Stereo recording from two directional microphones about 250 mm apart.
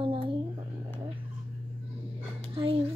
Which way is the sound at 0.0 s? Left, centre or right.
Right.